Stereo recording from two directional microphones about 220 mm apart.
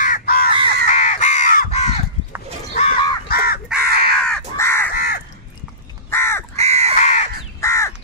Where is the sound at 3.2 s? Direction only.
45° left (ahead or behind).